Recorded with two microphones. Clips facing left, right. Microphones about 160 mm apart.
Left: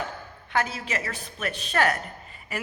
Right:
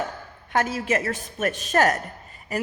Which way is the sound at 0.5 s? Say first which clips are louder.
Right 5 dB; 45° right (ahead or behind).